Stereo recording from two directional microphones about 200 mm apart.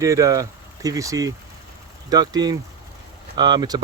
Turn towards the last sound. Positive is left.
turn(degrees=-20)  # may be behind; listen again after turning